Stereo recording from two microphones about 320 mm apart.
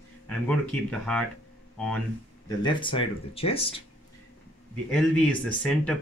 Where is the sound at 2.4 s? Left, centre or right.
Centre.